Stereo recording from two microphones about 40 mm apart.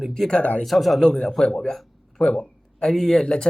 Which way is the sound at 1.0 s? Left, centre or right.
Centre.